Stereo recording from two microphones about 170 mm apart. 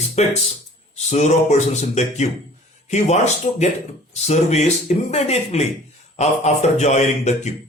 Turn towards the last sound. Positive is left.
turn(degrees=40)  # may be behind; listen again after turning